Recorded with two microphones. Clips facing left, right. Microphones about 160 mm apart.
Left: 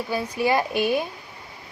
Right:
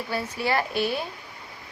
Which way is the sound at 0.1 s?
15° left (ahead or behind).